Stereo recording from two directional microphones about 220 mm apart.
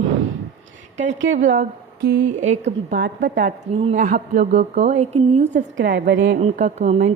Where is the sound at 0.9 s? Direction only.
30° right (ahead or behind).